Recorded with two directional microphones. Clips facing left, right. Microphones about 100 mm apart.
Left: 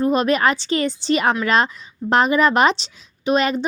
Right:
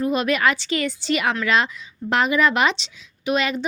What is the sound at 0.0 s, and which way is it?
Speech, 35° left (ahead or behind).